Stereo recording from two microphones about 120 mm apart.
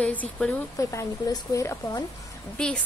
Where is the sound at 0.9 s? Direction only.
25° left (ahead or behind).